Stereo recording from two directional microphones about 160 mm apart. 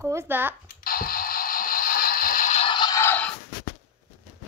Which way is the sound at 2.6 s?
30° left (ahead or behind).